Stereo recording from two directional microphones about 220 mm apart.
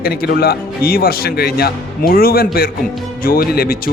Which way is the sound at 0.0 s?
45° left (ahead or behind).